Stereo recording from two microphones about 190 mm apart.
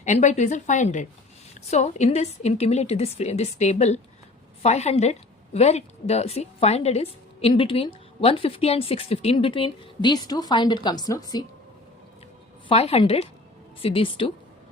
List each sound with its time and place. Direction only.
0.0 s a woman's voice: 40° left (ahead or behind); by 11.4 s 20° left (ahead or behind)
12.6 s a woman's voice: 30° left (ahead or behind)